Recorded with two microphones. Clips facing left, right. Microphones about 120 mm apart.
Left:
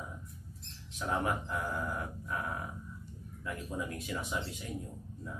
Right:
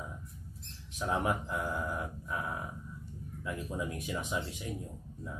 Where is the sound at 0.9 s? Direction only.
15° right (ahead or behind).